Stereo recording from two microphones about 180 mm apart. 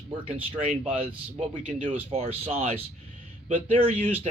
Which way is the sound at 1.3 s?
30° right (ahead or behind).